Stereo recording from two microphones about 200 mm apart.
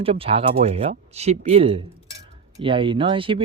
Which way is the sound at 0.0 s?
30° right (ahead or behind).